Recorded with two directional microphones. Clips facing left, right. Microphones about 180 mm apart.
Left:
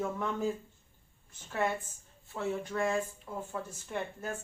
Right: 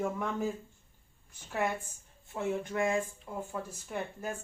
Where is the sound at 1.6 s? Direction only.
10° right (ahead or behind).